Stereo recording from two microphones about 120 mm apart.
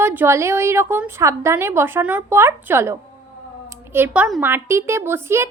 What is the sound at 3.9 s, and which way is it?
Speech, 15° right (ahead or behind).